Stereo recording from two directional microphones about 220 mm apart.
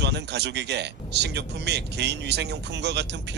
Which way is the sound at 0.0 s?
50° right (ahead or behind).